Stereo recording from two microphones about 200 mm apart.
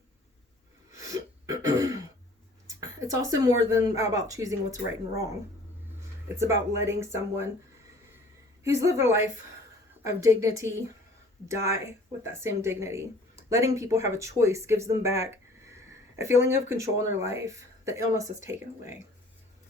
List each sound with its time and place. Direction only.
0.9 s throat clearing: 15° right (ahead or behind)
2.6 s speech: 15° right (ahead or behind)
8.6 s speech: 15° right (ahead or behind)